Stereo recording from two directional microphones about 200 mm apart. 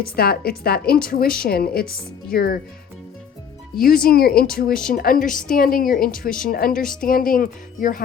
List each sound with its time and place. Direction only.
0.2 s a woman's voice: 50° left (ahead or behind)
3.8 s a woman's voice: 45° left (ahead or behind)